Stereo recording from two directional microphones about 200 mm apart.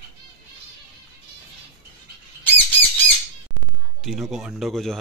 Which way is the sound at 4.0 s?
Centre (ahead or behind).